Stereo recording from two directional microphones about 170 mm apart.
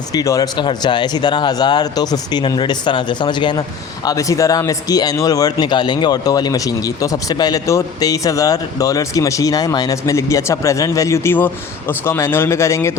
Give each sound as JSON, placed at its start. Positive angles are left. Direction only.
{"t": 0.1, "sound": "a man's voice", "side_deg": 20}